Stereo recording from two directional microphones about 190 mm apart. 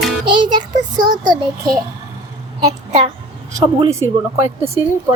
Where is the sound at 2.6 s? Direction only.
20° right (ahead or behind).